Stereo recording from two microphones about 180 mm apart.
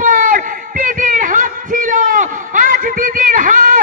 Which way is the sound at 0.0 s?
50° right (ahead or behind).